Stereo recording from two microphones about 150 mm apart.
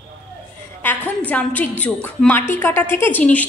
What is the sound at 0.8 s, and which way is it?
A woman's voice, 10° left (ahead or behind).